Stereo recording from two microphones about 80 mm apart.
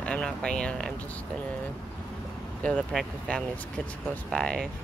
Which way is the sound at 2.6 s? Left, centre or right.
Centre.